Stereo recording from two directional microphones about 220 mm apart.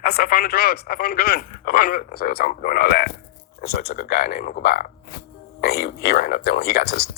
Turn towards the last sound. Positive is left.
turn(degrees=45)  # may be behind; listen again after turning